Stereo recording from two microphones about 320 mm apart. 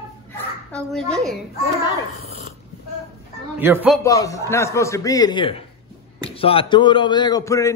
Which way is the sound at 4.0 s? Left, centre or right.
Centre.